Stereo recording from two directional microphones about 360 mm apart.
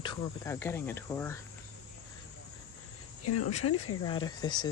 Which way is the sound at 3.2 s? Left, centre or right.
Left.